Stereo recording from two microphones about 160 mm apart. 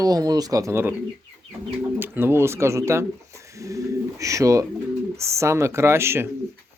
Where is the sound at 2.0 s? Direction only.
15° right (ahead or behind).